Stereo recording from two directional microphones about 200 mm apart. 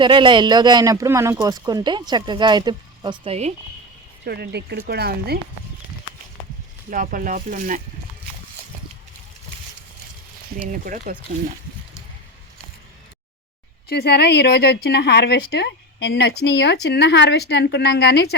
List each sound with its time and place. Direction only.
0.0 s speech: 25° right (ahead or behind)
4.3 s speech: 55° right (ahead or behind)
6.9 s speech: 45° right (ahead or behind)
10.6 s speech: 40° right (ahead or behind)
13.8 s speech: 55° left (ahead or behind)